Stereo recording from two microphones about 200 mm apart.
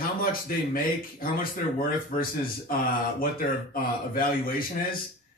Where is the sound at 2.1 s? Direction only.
45° left (ahead or behind).